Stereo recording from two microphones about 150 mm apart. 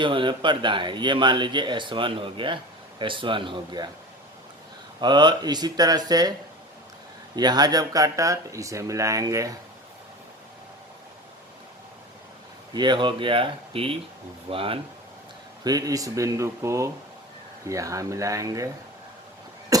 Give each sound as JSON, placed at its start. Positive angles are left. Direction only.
{"t": 0.0, "sound": "speech", "side_deg": -35}
{"t": 4.9, "sound": "speech", "side_deg": -30}
{"t": 7.3, "sound": "speech", "side_deg": -25}
{"t": 12.7, "sound": "speech", "side_deg": -30}
{"t": 15.6, "sound": "speech", "side_deg": -25}
{"t": 19.7, "sound": "a sound", "side_deg": -25}